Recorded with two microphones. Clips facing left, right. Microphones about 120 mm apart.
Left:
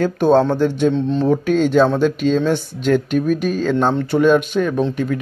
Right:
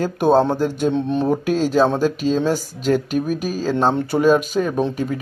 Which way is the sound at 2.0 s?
40° right (ahead or behind).